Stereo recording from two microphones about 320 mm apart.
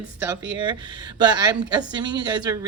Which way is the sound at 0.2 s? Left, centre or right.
Centre.